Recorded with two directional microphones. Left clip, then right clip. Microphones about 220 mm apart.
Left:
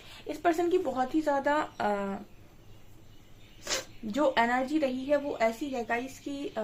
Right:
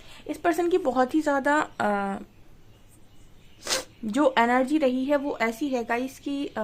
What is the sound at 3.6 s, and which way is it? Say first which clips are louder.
Speech: right 5 dB; 50° right (ahead or behind).